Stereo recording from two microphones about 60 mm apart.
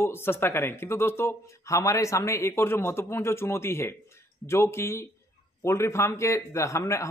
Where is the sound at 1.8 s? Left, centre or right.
Left.